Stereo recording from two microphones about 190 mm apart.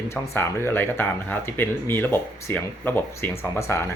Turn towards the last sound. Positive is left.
turn(degrees=15)  # may be behind; listen again after turning